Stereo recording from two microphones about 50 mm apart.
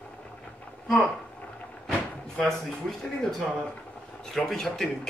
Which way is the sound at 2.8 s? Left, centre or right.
Centre.